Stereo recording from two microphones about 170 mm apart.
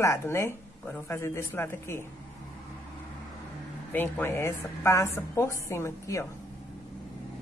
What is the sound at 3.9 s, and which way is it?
A woman's voice, 15° left (ahead or behind).